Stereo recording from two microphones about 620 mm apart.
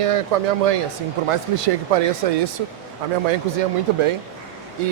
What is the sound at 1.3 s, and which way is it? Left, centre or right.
Speech, right.